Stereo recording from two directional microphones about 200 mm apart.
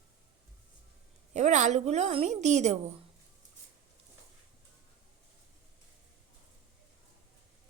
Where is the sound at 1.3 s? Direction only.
35° right (ahead or behind).